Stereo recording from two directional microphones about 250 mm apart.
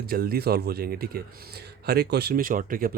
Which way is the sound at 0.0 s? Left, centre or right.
Right.